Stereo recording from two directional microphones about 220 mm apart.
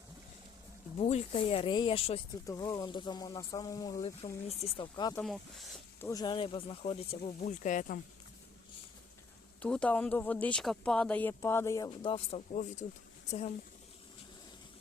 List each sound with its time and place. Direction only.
0.9 s speech: 30° left (ahead or behind)
5.2 s speech: centre (ahead or behind)
6.1 s speech: 20° left (ahead or behind); by 7.9 s 35° left (ahead or behind)
9.6 s speech: 5° left (ahead or behind)
11.9 s speech: 25° left (ahead or behind)